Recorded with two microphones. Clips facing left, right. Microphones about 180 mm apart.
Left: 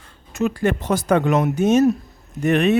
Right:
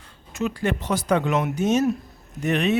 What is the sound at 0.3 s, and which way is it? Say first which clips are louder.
Speech: left 5 dB; 45° left (ahead or behind).